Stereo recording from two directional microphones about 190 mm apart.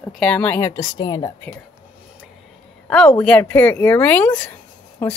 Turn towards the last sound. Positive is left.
turn(degrees=10)  # may be behind; listen again after turning